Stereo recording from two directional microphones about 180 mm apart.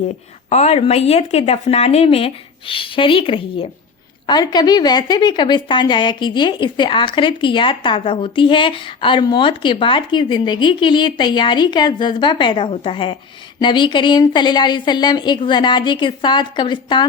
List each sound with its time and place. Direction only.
0.5 s a woman's voice: 35° left (ahead or behind)